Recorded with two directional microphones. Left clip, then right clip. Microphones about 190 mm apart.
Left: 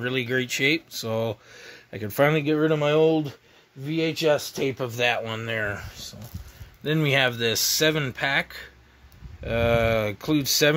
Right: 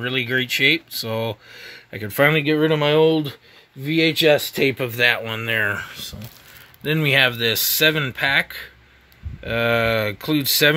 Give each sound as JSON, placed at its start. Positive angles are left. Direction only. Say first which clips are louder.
{"t": 0.0, "sound": "speech", "louder": "right 4 dB", "side_deg": -5}
{"t": 4.7, "sound": "speech", "louder": "right 5 dB", "side_deg": -15}
{"t": 6.8, "sound": "speech", "louder": "right 5 dB", "side_deg": -5}